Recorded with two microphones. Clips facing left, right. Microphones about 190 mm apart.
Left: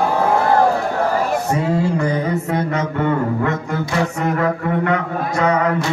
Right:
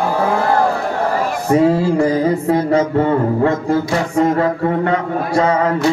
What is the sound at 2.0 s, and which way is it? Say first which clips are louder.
Mantra: right 5 dB; 30° right (ahead or behind).